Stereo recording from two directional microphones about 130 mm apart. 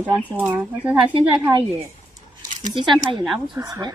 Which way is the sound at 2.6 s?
35° right (ahead or behind).